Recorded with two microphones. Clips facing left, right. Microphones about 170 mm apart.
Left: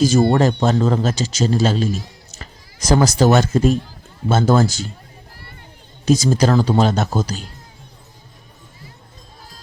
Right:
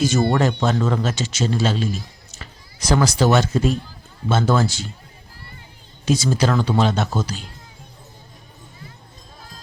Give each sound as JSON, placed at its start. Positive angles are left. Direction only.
{"t": 0.0, "sound": "a man's voice", "side_deg": 35}
{"t": 6.1, "sound": "a man's voice", "side_deg": 40}